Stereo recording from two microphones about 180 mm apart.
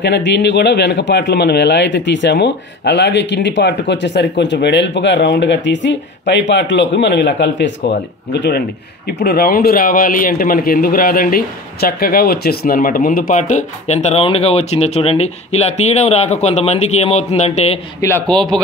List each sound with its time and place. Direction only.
0.0 s a man's voice: 70° left (ahead or behind); by 17.7 s 35° left (ahead or behind)
18.0 s a man's voice: 10° left (ahead or behind)